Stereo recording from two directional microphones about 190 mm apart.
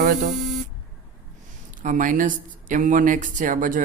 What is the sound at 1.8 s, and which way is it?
Speech, 45° right (ahead or behind).